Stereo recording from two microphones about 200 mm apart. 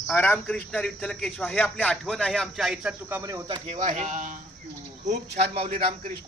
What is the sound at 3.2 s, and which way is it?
Speech, 15° right (ahead or behind).